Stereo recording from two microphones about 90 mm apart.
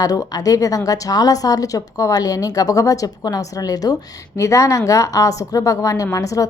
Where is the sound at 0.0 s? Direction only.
45° left (ahead or behind).